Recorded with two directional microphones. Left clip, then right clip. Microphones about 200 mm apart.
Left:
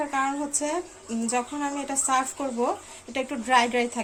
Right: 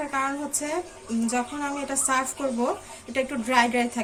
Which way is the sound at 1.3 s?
40° left (ahead or behind).